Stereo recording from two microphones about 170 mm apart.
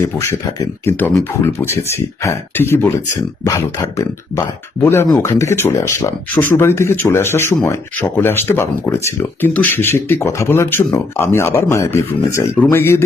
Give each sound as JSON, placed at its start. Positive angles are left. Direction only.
{"t": 0.0, "sound": "speech", "side_deg": 15}